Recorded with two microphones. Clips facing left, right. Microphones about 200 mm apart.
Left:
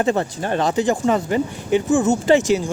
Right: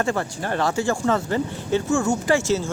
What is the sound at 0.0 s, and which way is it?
Speech, 20° left (ahead or behind).